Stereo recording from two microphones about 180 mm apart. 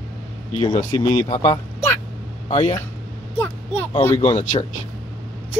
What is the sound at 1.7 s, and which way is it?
Vehicle, 15° left (ahead or behind).